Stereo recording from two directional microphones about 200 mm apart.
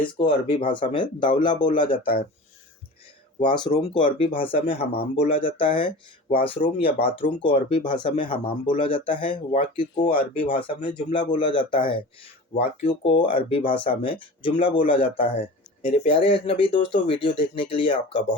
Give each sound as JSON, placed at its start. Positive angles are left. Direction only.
{"t": 0.0, "sound": "speech", "side_deg": 25}
{"t": 3.4, "sound": "speech", "side_deg": 20}